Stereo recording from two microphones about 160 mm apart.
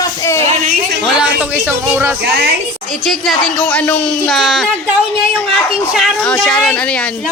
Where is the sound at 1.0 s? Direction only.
5° right (ahead or behind).